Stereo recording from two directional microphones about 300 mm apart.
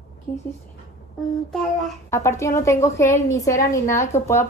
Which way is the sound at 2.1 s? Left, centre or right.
Centre.